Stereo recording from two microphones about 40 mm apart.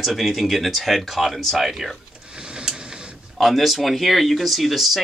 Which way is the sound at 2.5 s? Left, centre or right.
Centre.